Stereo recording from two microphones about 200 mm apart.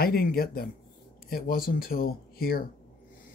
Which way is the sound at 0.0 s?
50° left (ahead or behind).